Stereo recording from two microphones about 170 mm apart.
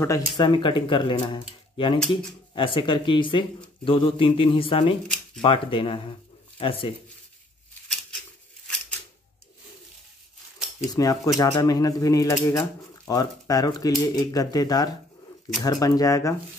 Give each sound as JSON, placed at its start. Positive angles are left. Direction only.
{"t": 0.0, "sound": "speech", "side_deg": 20}
{"t": 0.5, "sound": "a man's voice", "side_deg": 30}
{"t": 10.8, "sound": "speech", "side_deg": 20}